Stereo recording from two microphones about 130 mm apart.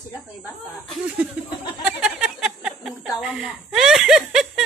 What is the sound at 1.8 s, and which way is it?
Chuckle, 5° right (ahead or behind).